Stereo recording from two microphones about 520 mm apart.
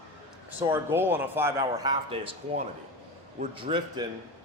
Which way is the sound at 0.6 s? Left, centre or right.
Centre.